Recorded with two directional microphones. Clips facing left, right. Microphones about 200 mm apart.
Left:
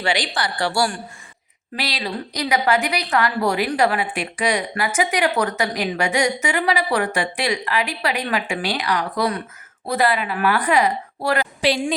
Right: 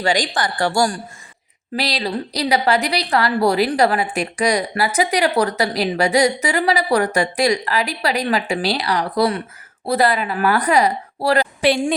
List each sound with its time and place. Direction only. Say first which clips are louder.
0.0 s a woman's voice: right 3 dB; 45° right (ahead or behind)
11.6 s a woman's voice: right 2 dB; 55° right (ahead or behind)